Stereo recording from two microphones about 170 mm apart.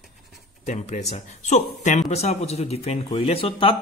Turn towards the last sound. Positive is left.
turn(degrees=35)  # may be behind; listen again after turning